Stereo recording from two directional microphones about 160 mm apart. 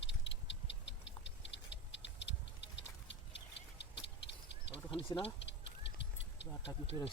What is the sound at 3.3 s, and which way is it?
Duck, 90° left.